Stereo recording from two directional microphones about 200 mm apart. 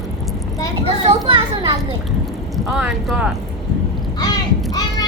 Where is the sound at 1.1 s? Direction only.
25° right (ahead or behind).